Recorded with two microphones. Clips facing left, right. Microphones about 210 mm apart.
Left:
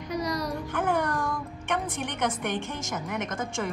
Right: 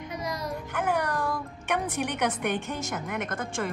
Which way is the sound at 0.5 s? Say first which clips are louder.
Left 1 dB; 5° right (ahead or behind).